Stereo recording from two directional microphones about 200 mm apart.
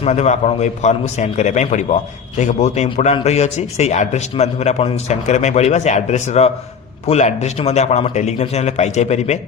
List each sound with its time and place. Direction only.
0.0 s a man's voice: 35° left (ahead or behind)